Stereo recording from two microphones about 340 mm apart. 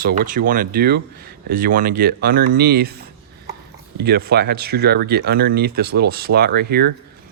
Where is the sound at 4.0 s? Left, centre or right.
Right.